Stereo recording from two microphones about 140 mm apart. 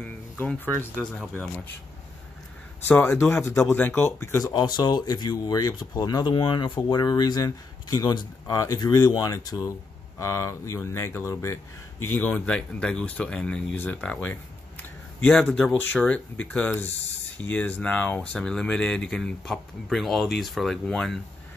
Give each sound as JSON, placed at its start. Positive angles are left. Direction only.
{"t": 0.9, "sound": "speech", "side_deg": -5}
{"t": 2.9, "sound": "speech", "side_deg": 15}
{"t": 4.5, "sound": "speech", "side_deg": 30}